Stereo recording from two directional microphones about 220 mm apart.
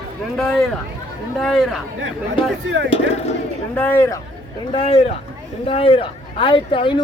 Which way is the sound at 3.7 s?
10° left (ahead or behind).